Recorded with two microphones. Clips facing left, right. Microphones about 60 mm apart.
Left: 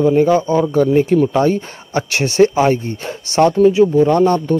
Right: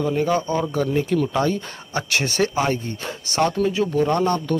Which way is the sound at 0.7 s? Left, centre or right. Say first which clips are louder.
Left 9 dB; left.